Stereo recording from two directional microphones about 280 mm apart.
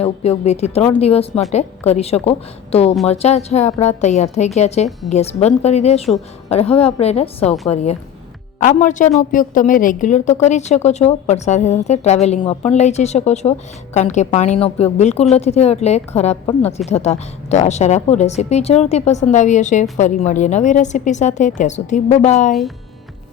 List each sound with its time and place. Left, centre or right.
0.0 s a woman's voice: left